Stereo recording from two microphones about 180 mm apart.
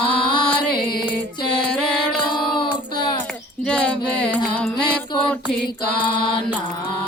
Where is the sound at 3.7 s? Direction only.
5° left (ahead or behind).